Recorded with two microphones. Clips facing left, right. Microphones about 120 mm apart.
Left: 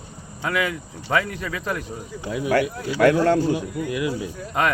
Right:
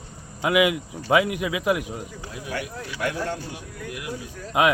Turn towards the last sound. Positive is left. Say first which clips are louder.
# right 2 dB
turn(degrees=-10)  # may be behind; listen again after turning